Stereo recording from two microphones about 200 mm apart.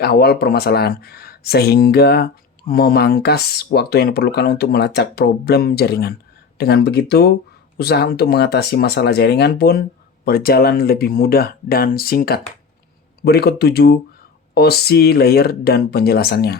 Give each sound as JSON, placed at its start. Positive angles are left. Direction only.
{"t": 0.0, "sound": "speech", "side_deg": 50}